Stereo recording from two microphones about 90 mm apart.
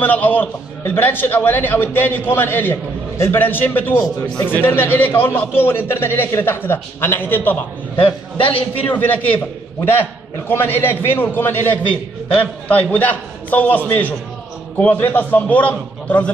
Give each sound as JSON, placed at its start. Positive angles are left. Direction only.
{"t": 0.0, "sound": "a man's voice", "side_deg": 20}
{"t": 7.9, "sound": "a man's voice", "side_deg": 80}
{"t": 8.9, "sound": "a man's voice", "side_deg": 20}
{"t": 10.5, "sound": "a man's voice", "side_deg": 25}